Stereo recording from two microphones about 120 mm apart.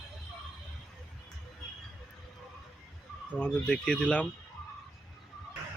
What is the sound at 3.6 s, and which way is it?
Speech, 5° left (ahead or behind).